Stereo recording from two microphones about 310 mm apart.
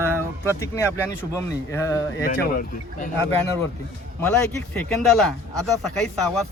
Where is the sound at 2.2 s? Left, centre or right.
Left.